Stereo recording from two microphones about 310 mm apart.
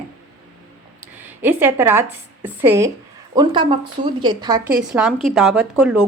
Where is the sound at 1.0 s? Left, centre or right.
Centre.